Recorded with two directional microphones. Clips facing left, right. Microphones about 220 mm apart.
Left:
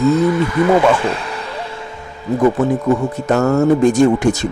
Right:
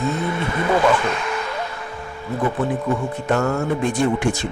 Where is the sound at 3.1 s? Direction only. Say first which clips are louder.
Left 6 dB; 40° left (ahead or behind).